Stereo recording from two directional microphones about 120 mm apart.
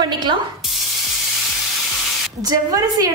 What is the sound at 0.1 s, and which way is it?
Speech, 40° right (ahead or behind).